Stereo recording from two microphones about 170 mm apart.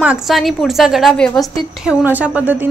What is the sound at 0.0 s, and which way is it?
A woman's voice, 5° right (ahead or behind).